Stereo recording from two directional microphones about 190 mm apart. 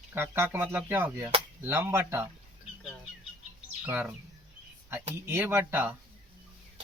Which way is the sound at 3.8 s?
10° right (ahead or behind).